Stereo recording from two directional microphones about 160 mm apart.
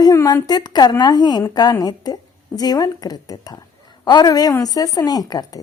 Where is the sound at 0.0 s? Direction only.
20° left (ahead or behind).